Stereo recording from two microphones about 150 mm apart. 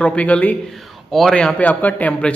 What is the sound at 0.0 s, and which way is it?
A man's voice, 10° left (ahead or behind).